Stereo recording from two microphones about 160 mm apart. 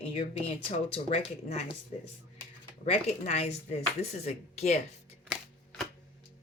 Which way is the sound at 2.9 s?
40° left (ahead or behind).